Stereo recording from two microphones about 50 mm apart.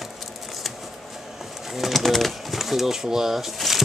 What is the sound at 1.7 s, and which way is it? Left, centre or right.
Bird, centre.